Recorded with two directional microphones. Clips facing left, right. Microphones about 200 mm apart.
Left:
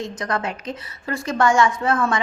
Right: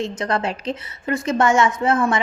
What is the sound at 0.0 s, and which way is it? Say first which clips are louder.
A woman's voice: right 3 dB; 25° right (ahead or behind).